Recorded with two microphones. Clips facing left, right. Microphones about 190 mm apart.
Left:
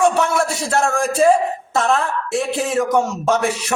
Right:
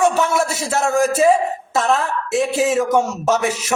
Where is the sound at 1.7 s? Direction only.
Centre (ahead or behind).